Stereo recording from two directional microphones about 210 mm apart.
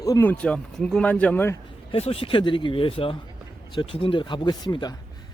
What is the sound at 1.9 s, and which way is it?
Speech, 25° left (ahead or behind).